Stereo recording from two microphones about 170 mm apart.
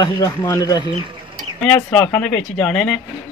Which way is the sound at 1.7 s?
10° left (ahead or behind).